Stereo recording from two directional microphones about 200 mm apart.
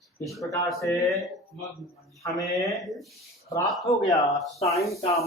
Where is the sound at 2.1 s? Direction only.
15° left (ahead or behind).